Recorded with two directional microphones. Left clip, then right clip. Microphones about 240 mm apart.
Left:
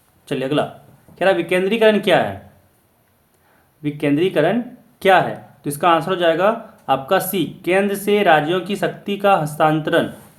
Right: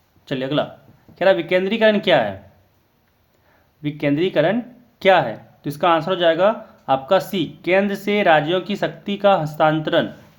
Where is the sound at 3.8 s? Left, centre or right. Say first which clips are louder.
Left 2 dB; right.